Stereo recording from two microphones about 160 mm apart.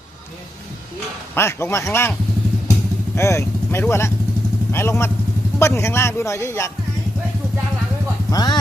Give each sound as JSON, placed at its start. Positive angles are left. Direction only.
{"t": 1.4, "sound": "a man's voice", "side_deg": 15}
{"t": 3.2, "sound": "a man's voice", "side_deg": 20}
{"t": 8.3, "sound": "speech", "side_deg": 25}